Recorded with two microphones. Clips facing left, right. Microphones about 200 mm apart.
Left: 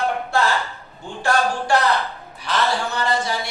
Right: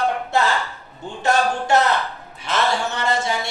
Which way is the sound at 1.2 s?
20° right (ahead or behind).